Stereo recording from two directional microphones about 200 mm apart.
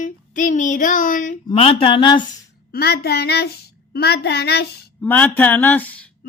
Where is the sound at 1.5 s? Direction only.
30° left (ahead or behind).